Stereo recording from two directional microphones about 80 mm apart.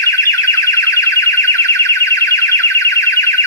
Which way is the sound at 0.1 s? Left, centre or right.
Left.